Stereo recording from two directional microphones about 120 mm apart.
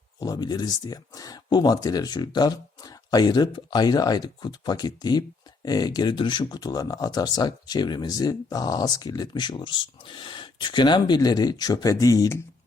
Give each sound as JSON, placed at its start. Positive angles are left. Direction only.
{"t": 0.2, "sound": "speech", "side_deg": 35}